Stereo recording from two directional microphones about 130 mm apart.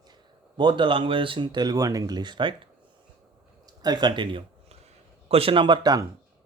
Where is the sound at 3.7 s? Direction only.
30° right (ahead or behind).